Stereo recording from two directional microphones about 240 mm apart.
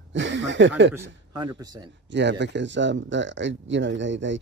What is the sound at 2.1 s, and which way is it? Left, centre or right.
Speech, right.